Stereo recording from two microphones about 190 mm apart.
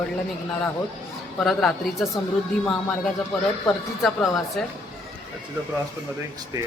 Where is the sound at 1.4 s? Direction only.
Centre (ahead or behind).